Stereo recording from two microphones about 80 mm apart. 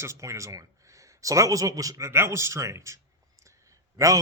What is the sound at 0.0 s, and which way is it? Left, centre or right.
A man's voice, right.